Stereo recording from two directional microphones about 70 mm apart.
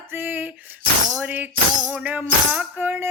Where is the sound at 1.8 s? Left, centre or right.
Centre.